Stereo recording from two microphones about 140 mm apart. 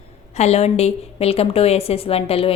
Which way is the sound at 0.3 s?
50° left (ahead or behind).